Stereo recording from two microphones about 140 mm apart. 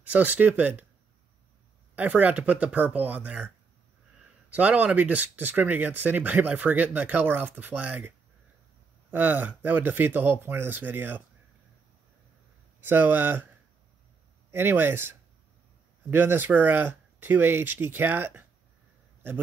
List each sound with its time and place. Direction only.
0.0 s speech: 10° right (ahead or behind)
2.0 s speech: 10° right (ahead or behind)
4.5 s speech: 10° right (ahead or behind)
9.1 s speech: 10° right (ahead or behind)
12.8 s speech: 15° right (ahead or behind)
14.5 s speech: 15° right (ahead or behind)
16.1 s speech: 15° right (ahead or behind)